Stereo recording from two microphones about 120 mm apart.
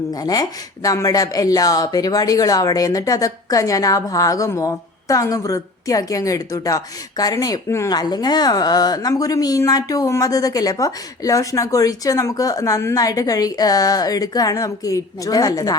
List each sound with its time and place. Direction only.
0.1 s speech: 30° left (ahead or behind)